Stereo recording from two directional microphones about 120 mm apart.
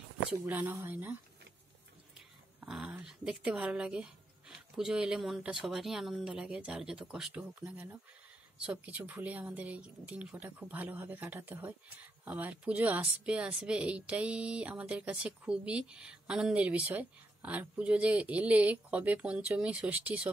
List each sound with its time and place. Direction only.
0.3 s speech: 15° right (ahead or behind)
2.1 s speech: 5° right (ahead or behind)